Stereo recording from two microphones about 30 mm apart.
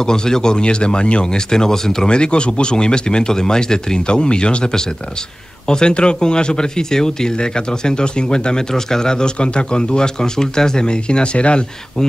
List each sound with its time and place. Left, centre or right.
0.0 s speech: left
1.5 s speech: left
2.0 s speech: left
5.7 s speech: left